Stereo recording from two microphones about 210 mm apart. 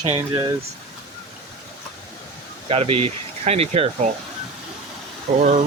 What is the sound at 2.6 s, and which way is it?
Speech, 25° right (ahead or behind).